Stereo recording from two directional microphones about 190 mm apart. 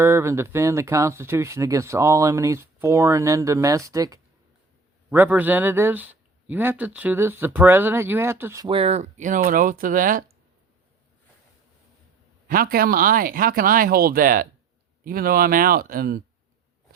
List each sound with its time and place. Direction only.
0.0 s speech: 15° right (ahead or behind)
8.6 s speech: 30° right (ahead or behind); by 10.2 s 45° right (ahead or behind)
12.5 s speech: 50° right (ahead or behind)